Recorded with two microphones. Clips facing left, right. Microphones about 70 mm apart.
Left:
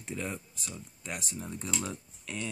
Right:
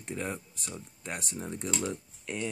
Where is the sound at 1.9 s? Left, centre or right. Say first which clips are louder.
Right 4 dB; right.